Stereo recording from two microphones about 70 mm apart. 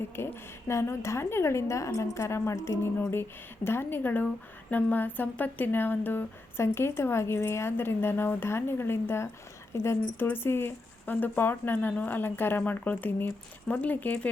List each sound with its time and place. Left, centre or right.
0.2 s speech: left